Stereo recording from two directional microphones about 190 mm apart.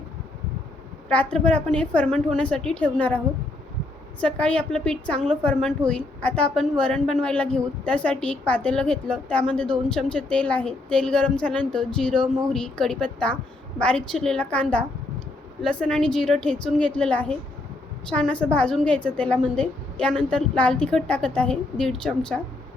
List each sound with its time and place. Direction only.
1.0 s a woman's voice: 5° left (ahead or behind)
4.2 s a woman's voice: 5° left (ahead or behind)